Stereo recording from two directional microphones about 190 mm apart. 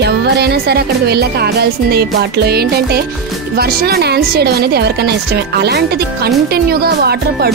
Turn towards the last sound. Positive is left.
turn(degrees=-55)  # may be behind; listen again after turning